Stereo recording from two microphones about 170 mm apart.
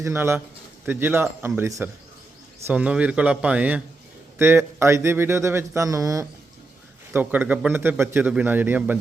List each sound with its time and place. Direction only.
0.0 s speech: 15° right (ahead or behind)